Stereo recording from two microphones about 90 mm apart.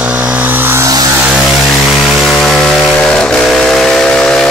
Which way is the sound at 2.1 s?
Centre (ahead or behind).